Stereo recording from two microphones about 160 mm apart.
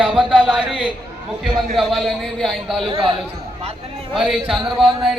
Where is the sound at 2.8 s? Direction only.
30° right (ahead or behind).